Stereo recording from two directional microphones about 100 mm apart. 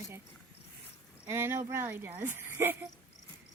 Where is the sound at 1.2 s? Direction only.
25° right (ahead or behind).